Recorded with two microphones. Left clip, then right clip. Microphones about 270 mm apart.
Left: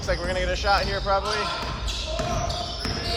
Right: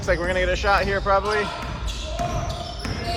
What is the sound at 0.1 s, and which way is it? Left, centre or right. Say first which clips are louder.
Speech: right 5 dB; right.